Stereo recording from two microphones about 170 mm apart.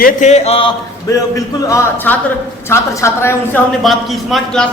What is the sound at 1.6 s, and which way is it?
A woman's voice, 15° left (ahead or behind).